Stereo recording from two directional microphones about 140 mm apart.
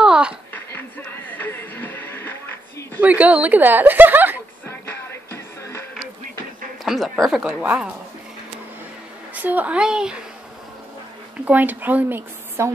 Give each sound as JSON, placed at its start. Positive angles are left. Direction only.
{"t": 0.0, "sound": "a sound", "side_deg": -5}
{"t": 0.5, "sound": "music", "side_deg": 15}
{"t": 3.0, "sound": "speech", "side_deg": -10}
{"t": 4.6, "sound": "music", "side_deg": 15}
{"t": 6.8, "sound": "a woman's voice", "side_deg": 0}
{"t": 9.3, "sound": "a woman's voice", "side_deg": -10}
{"t": 11.4, "sound": "a woman's voice", "side_deg": -10}